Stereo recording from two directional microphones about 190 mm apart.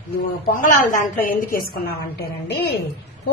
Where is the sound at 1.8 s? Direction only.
55° left (ahead or behind).